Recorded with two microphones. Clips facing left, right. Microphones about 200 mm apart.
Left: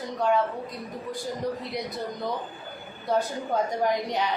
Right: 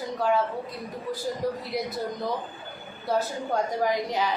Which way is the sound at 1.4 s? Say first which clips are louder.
Right 1 dB; 5° right (ahead or behind).